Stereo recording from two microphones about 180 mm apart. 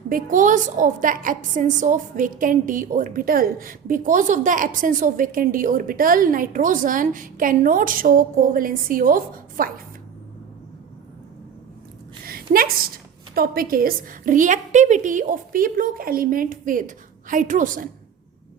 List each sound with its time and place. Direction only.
0.1 s a woman's voice: 45° right (ahead or behind)
12.2 s a sound: 55° right (ahead or behind)
13.3 s a woman's voice: 55° right (ahead or behind)